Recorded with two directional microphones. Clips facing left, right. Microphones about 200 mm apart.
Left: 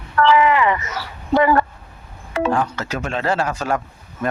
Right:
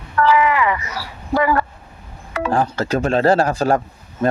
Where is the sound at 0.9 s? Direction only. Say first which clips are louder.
Left 2 dB; 25° left (ahead or behind).